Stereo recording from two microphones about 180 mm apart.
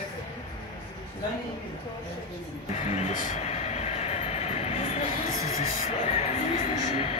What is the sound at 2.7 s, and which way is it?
Vehicle, 40° left (ahead or behind).